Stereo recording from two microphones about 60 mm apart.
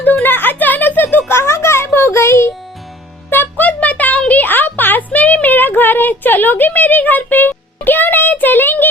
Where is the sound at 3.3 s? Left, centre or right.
Left.